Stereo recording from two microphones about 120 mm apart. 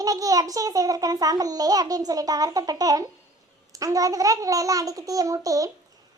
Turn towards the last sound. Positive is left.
turn(degrees=-30)  # may be behind; listen again after turning